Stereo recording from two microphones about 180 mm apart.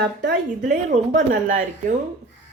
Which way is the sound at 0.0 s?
65° right (ahead or behind).